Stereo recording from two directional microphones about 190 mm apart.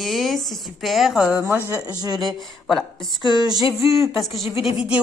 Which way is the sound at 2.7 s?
Centre (ahead or behind).